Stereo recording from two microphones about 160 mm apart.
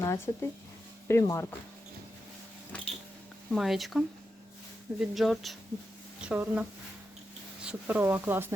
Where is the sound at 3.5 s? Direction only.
Centre (ahead or behind).